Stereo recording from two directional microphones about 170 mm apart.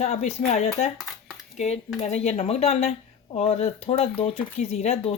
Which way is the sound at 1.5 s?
45° left (ahead or behind).